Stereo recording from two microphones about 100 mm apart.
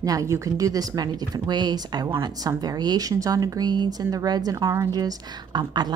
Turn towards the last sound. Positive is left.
turn(degrees=-45)  # may be behind; listen again after turning